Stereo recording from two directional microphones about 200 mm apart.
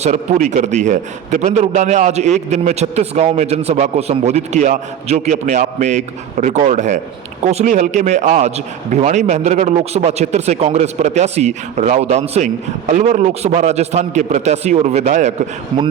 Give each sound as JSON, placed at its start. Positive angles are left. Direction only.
{"t": 0.0, "sound": "a man's voice", "side_deg": -35}